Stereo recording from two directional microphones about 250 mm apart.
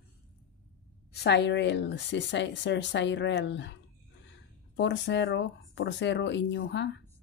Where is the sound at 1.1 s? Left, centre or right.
Left.